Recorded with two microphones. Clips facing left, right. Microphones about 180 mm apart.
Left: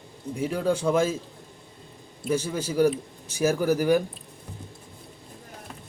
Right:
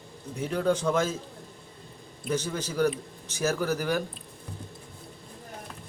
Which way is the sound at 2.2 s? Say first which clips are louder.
Left 3 dB; 10° left (ahead or behind).